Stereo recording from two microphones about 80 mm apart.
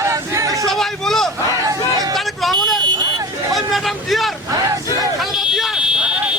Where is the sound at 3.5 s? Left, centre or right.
Centre.